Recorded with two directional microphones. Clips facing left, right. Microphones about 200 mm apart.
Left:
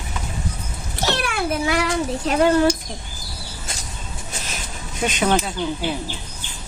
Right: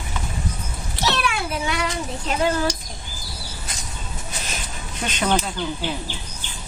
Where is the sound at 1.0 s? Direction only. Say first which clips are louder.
Left 2 dB; 55° left (ahead or behind).